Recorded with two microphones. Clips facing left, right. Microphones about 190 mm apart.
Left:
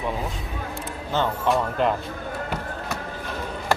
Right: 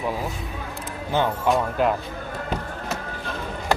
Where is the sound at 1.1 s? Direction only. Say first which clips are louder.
Right 1 dB; 15° right (ahead or behind).